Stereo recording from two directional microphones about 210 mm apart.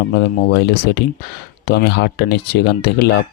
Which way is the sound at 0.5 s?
50° left (ahead or behind).